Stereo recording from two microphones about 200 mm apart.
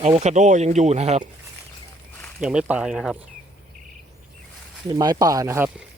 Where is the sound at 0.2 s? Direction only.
35° right (ahead or behind).